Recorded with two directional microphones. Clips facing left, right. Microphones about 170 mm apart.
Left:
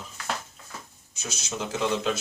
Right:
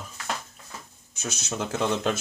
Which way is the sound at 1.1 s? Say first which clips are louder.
Right 3 dB; 50° right (ahead or behind).